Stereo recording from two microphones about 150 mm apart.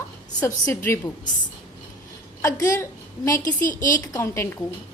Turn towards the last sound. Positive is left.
turn(degrees=15)  # may be behind; listen again after turning